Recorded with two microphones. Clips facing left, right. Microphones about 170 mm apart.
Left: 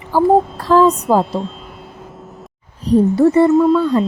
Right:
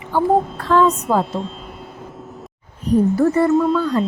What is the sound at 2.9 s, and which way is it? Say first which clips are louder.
Speech: left 4 dB; 25° left (ahead or behind).